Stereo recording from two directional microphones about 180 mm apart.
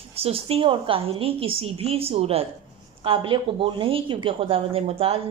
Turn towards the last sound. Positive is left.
turn(degrees=-30)  # may be behind; listen again after turning